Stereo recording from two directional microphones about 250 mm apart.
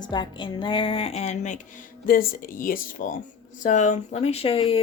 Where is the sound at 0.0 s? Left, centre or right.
Centre.